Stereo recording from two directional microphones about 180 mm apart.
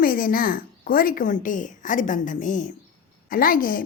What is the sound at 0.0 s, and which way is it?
A woman's voice, 55° left (ahead or behind).